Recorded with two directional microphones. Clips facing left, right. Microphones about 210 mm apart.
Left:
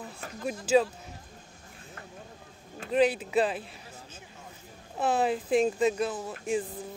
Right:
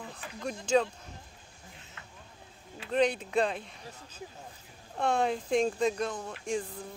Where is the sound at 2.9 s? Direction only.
5° left (ahead or behind).